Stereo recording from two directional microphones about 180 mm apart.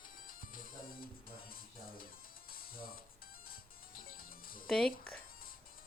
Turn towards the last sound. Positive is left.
turn(degrees=5)  # may be behind; listen again after turning